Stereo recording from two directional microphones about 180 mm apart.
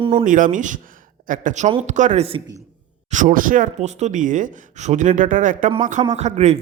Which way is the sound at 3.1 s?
45° right (ahead or behind).